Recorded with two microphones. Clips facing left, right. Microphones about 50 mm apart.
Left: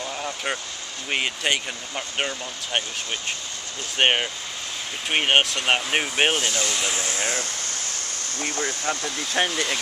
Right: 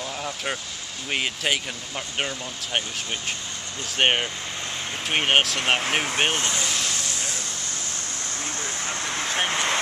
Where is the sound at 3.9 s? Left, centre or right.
Centre.